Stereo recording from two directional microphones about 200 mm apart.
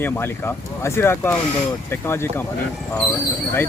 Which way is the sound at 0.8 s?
10° left (ahead or behind).